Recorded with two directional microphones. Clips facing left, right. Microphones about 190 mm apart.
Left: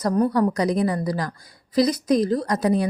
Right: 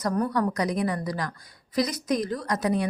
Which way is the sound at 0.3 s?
30° left (ahead or behind).